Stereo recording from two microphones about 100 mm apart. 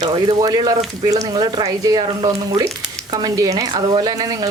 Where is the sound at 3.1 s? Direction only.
40° right (ahead or behind).